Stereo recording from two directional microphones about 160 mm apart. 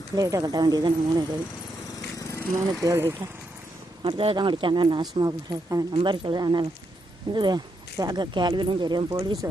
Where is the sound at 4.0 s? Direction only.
35° right (ahead or behind).